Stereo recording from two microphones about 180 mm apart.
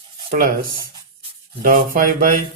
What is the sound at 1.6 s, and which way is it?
Speech, 50° right (ahead or behind).